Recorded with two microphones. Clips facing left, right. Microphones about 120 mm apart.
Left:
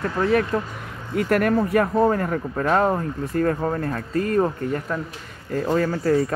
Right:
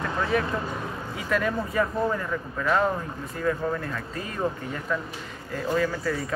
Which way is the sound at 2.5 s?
45° left (ahead or behind).